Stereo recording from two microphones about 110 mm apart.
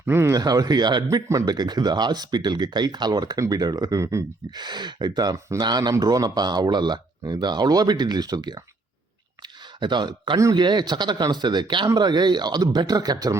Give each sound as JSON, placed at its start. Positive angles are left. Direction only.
{"t": 0.0, "sound": "speech", "side_deg": -20}
{"t": 0.3, "sound": "speech", "side_deg": -35}
{"t": 4.5, "sound": "speech", "side_deg": -40}
{"t": 9.8, "sound": "speech", "side_deg": -45}